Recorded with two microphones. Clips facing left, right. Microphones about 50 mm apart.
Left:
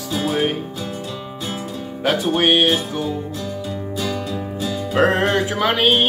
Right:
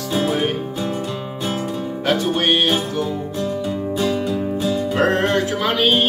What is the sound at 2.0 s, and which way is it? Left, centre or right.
Music, centre.